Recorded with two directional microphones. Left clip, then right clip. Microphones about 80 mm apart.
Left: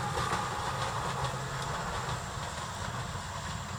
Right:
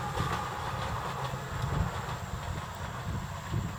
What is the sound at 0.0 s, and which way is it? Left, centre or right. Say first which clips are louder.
Train: left 1 dB; centre.